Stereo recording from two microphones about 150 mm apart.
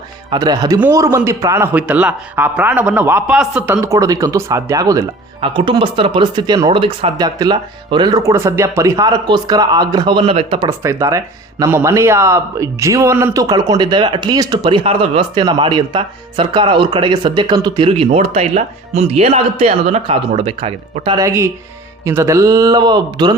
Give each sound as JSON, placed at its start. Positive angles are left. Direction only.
{"t": 0.3, "sound": "a man's voice", "side_deg": -25}
{"t": 3.8, "sound": "speech", "side_deg": -20}
{"t": 10.7, "sound": "speech", "side_deg": -20}
{"t": 21.2, "sound": "speech", "side_deg": -20}